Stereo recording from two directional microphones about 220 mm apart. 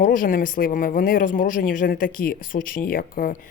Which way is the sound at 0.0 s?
40° left (ahead or behind).